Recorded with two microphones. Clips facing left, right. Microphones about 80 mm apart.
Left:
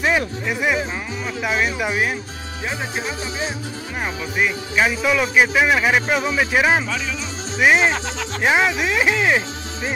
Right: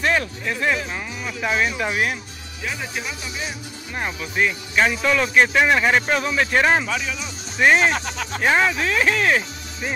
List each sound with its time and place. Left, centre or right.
0.0 s speech: centre
4.0 s speech: centre